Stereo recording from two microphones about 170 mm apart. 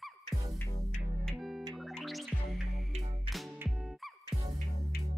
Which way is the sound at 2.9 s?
35° right (ahead or behind).